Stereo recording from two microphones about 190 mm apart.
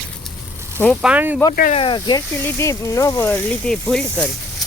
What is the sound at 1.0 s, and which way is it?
Speech, 10° right (ahead or behind).